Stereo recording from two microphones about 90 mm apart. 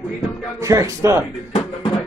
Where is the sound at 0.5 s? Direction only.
35° right (ahead or behind).